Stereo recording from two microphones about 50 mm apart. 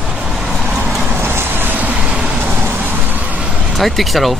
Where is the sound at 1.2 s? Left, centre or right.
Right.